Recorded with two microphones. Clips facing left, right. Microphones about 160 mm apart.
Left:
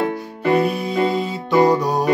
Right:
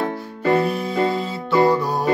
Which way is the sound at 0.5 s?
15° left (ahead or behind).